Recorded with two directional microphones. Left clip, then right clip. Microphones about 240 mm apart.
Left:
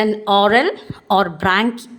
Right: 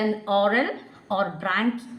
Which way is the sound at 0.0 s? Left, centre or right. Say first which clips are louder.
Left 8 dB; left.